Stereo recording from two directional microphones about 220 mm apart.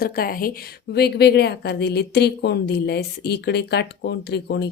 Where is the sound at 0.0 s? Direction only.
40° left (ahead or behind).